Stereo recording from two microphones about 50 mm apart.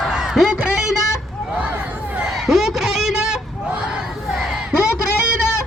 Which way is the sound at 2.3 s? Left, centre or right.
Centre.